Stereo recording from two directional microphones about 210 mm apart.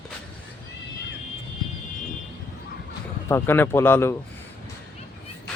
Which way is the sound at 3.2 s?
10° left (ahead or behind).